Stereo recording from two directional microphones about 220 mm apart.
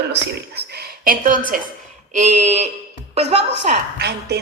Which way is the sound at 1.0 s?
40° right (ahead or behind).